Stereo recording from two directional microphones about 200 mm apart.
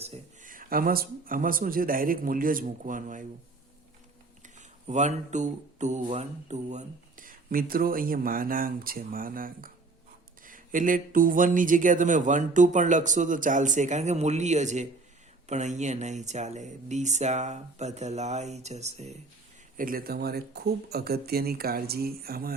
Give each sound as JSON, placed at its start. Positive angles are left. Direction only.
{"t": 0.0, "sound": "speech", "side_deg": -35}
{"t": 4.4, "sound": "speech", "side_deg": -35}
{"t": 19.7, "sound": "speech", "side_deg": -45}